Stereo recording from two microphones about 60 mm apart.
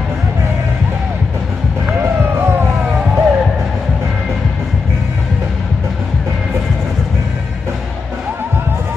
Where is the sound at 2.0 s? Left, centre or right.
Right.